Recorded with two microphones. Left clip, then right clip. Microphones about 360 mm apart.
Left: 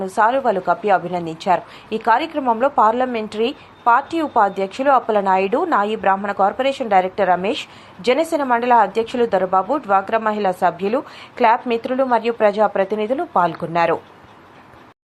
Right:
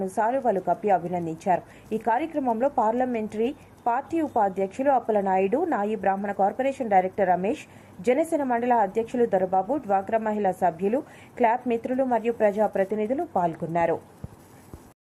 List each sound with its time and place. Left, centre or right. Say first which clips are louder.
0.0 s a woman's voice: left 8 dB; right